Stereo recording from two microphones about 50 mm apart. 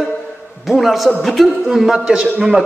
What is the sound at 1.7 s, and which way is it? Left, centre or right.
Speech, centre.